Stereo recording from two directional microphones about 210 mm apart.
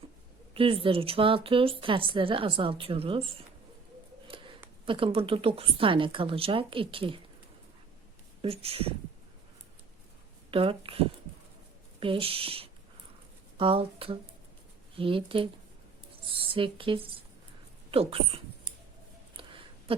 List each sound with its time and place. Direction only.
0.5 s a woman's voice: 25° right (ahead or behind)
4.3 s a sound: 25° right (ahead or behind)
4.9 s a woman's voice: 25° right (ahead or behind)
8.4 s a woman's voice: 25° right (ahead or behind)
10.5 s a woman's voice: 25° right (ahead or behind)
19.3 s a sound: 25° right (ahead or behind)